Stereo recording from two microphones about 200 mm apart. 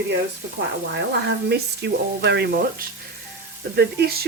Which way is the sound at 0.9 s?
60° right (ahead or behind).